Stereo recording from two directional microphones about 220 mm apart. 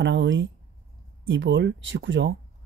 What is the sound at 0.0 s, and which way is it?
Speech, 55° right (ahead or behind).